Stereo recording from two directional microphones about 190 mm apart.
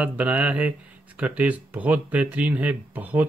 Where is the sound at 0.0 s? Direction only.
5° right (ahead or behind).